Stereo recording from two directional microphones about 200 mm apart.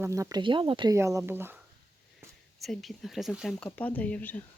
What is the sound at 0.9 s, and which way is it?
Speech, 15° right (ahead or behind).